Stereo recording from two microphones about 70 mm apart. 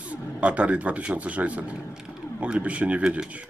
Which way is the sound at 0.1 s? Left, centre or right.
Centre.